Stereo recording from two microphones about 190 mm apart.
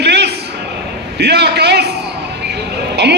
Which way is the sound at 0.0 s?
60° right (ahead or behind).